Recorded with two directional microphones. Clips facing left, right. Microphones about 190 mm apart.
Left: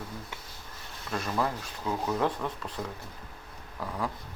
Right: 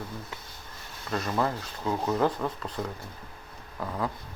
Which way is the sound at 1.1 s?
Centre (ahead or behind).